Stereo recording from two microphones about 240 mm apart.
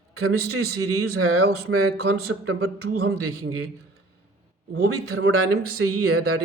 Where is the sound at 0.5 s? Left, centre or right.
Right.